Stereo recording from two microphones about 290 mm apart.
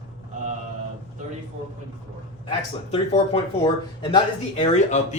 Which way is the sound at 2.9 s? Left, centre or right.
Left.